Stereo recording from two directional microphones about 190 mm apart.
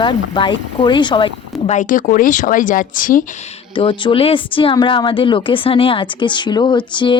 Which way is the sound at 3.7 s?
25° left (ahead or behind).